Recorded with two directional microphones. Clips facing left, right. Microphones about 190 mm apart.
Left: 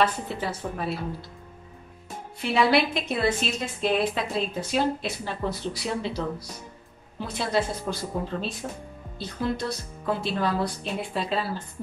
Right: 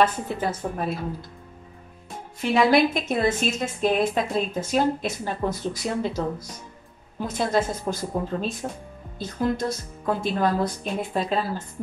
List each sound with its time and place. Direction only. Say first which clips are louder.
0.0 s a woman's voice: right 3 dB; 45° right (ahead or behind)
2.5 s a woman's voice: right 3 dB; 45° right (ahead or behind)